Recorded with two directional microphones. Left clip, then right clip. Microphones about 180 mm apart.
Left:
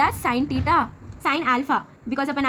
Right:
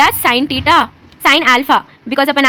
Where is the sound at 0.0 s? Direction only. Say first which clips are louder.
Right 10 dB; 35° right (ahead or behind).